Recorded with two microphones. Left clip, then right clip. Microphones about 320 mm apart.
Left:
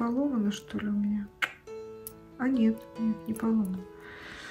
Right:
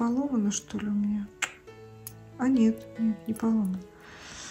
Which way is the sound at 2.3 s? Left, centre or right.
Centre.